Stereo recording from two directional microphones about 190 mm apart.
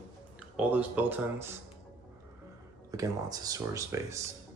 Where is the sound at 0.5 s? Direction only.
10° right (ahead or behind).